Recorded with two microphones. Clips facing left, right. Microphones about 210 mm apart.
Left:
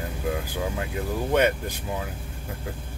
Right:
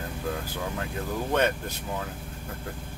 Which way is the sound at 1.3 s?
10° left (ahead or behind).